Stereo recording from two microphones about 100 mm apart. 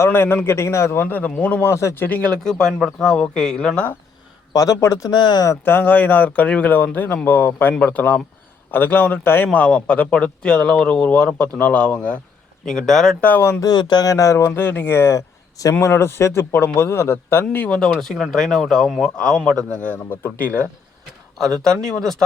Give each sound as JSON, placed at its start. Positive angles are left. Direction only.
{"t": 0.0, "sound": "a man's voice", "side_deg": 25}
{"t": 1.6, "sound": "a man's voice", "side_deg": 30}
{"t": 2.0, "sound": "a man's voice", "side_deg": 15}
{"t": 3.1, "sound": "a man's voice", "side_deg": 5}
{"t": 4.5, "sound": "speech", "side_deg": 35}
{"t": 5.1, "sound": "speech", "side_deg": 45}
{"t": 5.5, "sound": "a man's voice", "side_deg": 20}
{"t": 13.2, "sound": "a man's voice", "side_deg": 20}
{"t": 13.7, "sound": "a man's voice", "side_deg": 45}
{"t": 17.7, "sound": "a man's voice", "side_deg": 5}